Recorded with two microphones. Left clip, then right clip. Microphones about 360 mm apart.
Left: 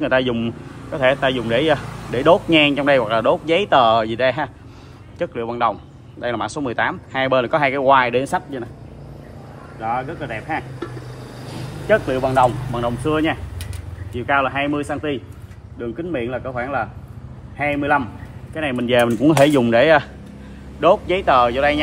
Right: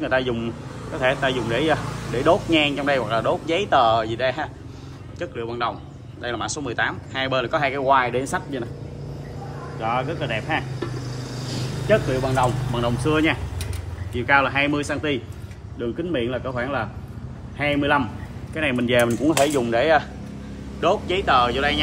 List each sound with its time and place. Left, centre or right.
0.0 s speech: centre
9.8 s speech: centre
11.9 s speech: centre